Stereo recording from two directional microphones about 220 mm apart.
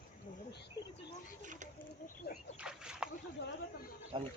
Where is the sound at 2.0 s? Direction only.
45° left (ahead or behind).